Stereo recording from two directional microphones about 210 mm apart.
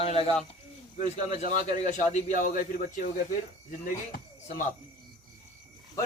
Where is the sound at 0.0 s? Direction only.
30° left (ahead or behind).